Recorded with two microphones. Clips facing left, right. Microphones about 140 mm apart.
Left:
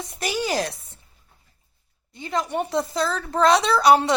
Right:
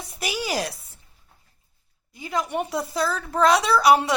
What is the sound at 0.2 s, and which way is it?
Chopping, 10° right (ahead or behind).